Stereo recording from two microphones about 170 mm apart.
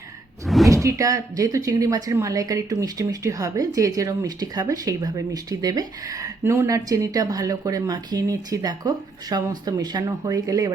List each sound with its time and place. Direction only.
0.4 s door: centre (ahead or behind)
0.7 s speech: 20° right (ahead or behind)